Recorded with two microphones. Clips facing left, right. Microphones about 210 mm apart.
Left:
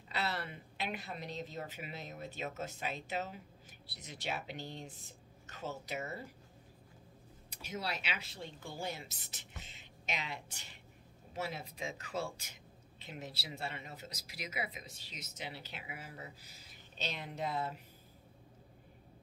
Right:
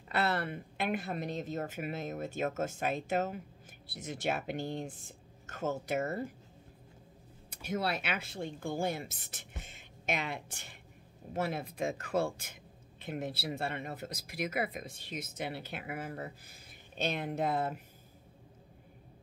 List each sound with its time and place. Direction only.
0.1 s speech: 55° right (ahead or behind)
7.4 s speech: 55° right (ahead or behind)